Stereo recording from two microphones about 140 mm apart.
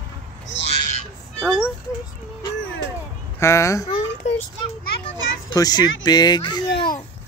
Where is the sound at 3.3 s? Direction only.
20° left (ahead or behind).